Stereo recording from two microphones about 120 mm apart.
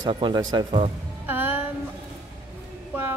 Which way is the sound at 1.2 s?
15° right (ahead or behind).